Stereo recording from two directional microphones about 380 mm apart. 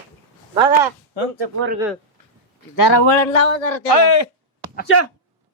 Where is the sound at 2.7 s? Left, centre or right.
Left.